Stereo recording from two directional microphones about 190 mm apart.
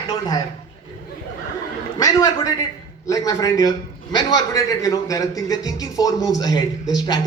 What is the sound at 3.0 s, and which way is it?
A man's voice, 20° left (ahead or behind).